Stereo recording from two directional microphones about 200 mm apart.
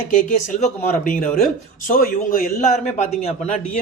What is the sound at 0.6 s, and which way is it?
Speech, 40° left (ahead or behind).